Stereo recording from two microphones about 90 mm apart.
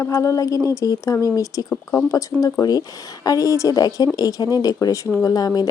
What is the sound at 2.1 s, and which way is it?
Speech, 40° left (ahead or behind).